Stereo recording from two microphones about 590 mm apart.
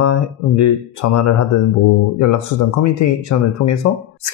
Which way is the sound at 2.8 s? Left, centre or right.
Left.